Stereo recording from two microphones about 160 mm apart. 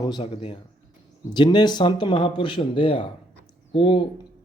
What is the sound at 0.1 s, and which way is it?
Speech, 30° left (ahead or behind).